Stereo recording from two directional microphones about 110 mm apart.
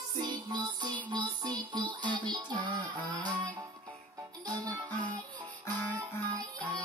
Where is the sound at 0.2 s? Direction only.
40° right (ahead or behind).